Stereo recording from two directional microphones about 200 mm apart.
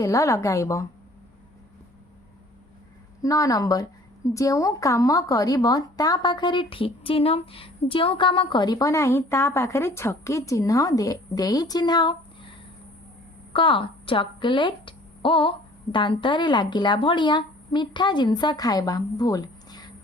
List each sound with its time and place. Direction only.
0.0 s a woman's voice: 15° left (ahead or behind)
3.2 s a woman's voice: 15° left (ahead or behind)